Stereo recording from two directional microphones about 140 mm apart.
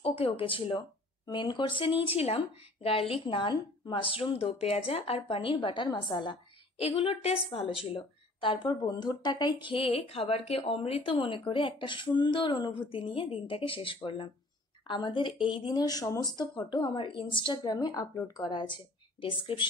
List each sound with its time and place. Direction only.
0.0 s a woman's voice: 45° left (ahead or behind)